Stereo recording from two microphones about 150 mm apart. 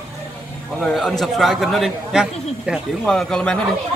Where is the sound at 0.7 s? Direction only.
Centre (ahead or behind).